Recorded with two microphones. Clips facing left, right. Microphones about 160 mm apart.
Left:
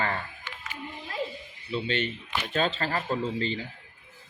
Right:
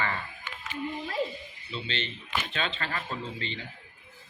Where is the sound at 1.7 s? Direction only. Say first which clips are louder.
Left 7 dB; 50° left (ahead or behind).